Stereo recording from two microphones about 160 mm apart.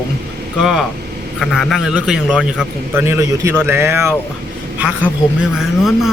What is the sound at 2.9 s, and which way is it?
A man's voice, 15° right (ahead or behind).